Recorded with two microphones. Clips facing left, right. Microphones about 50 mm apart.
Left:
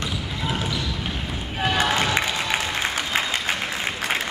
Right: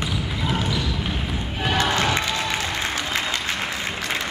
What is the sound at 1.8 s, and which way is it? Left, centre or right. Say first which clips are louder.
Crowd: even; centre.